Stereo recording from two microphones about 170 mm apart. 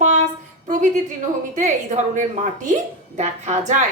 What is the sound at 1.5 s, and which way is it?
A woman's voice, 45° right (ahead or behind).